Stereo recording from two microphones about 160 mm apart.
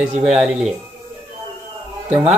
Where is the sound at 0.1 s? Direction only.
5° right (ahead or behind).